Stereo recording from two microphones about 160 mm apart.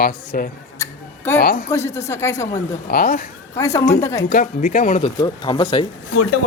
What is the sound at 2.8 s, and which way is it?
Speech, 65° left (ahead or behind).